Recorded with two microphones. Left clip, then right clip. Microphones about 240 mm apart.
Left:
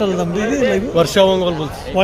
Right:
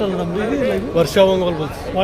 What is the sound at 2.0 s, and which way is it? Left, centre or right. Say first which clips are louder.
Speech: left 3 dB; left.